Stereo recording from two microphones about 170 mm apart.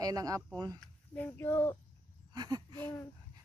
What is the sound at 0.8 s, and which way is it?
Speech, 10° left (ahead or behind).